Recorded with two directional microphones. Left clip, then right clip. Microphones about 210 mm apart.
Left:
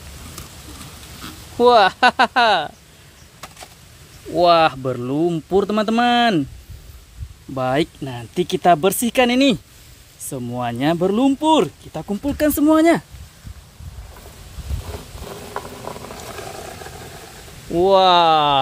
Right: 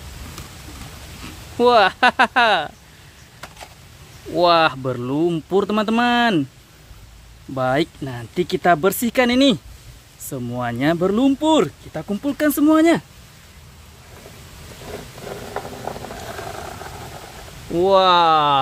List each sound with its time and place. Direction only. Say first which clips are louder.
1.6 s speech: left 1 dB; 5° left (ahead or behind)
4.4 s speech: left 1 dB; 10° left (ahead or behind)
7.5 s speech: even; 10° left (ahead or behind)
17.7 s speech: left 1 dB; 10° left (ahead or behind)